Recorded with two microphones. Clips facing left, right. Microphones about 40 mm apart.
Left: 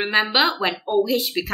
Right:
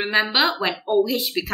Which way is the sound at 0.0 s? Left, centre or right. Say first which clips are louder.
Left 1 dB; centre.